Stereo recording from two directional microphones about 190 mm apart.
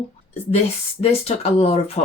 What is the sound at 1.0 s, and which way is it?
Speech, 30° left (ahead or behind).